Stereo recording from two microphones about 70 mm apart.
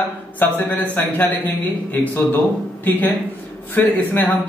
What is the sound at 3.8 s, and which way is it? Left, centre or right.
Speech, left.